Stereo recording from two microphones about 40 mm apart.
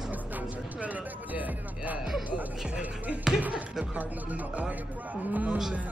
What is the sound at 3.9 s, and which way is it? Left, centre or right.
A man's voice, right.